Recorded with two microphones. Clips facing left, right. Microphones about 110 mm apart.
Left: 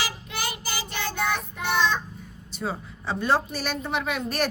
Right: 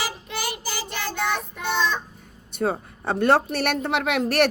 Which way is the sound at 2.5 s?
55° right (ahead or behind).